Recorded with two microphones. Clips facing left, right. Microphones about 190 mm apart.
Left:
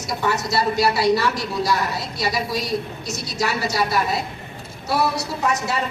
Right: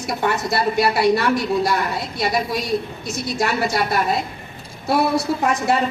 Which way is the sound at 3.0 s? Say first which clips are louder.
Right 3 dB; 50° right (ahead or behind).